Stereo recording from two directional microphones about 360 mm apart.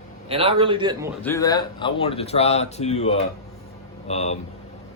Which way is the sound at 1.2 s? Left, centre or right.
Centre.